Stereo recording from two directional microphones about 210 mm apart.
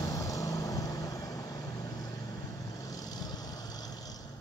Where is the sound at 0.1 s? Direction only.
15° left (ahead or behind).